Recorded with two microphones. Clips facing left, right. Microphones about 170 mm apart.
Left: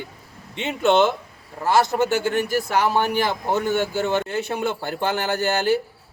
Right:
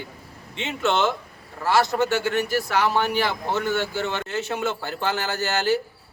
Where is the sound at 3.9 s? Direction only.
45° left (ahead or behind).